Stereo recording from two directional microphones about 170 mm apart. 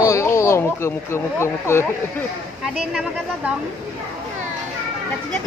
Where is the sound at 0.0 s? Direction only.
20° left (ahead or behind).